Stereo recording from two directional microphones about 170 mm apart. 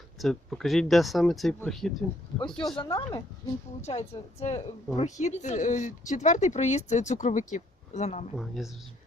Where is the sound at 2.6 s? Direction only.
25° left (ahead or behind).